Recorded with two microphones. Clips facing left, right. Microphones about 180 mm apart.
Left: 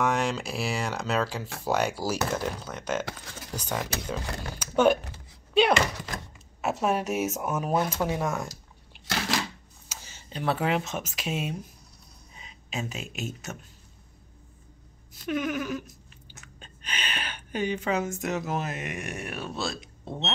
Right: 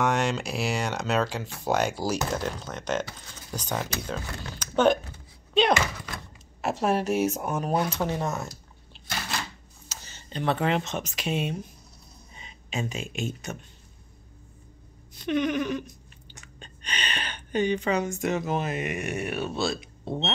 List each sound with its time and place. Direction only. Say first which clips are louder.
0.0 s speech: right 1 dB; centre (ahead or behind)
9.0 s a sound: left 5 dB; 90° left
9.8 s speech: right 1 dB; 10° left (ahead or behind)
15.1 s speech: right 3 dB; 5° left (ahead or behind)